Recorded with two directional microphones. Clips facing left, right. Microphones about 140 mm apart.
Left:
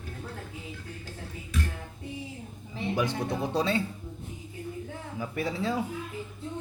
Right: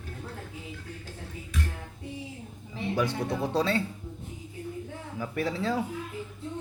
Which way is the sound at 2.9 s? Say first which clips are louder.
Right 1 dB; 20° left (ahead or behind).